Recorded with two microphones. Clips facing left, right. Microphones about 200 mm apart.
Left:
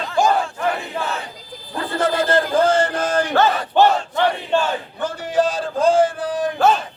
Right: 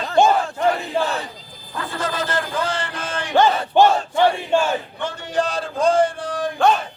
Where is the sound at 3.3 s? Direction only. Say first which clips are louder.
Right 4 dB; 15° right (ahead or behind).